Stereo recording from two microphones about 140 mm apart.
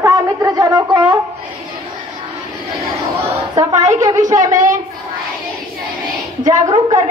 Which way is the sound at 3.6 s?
25° right (ahead or behind).